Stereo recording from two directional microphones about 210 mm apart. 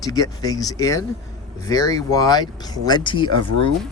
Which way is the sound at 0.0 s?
15° left (ahead or behind).